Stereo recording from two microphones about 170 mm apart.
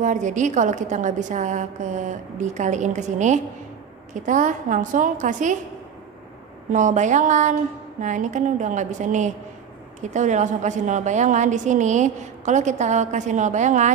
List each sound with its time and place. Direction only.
0.0 s a woman's voice: 45° right (ahead or behind)
6.7 s a woman's voice: 45° right (ahead or behind)